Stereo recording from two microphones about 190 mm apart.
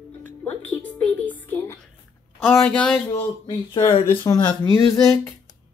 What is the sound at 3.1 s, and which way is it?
Speech, 25° left (ahead or behind).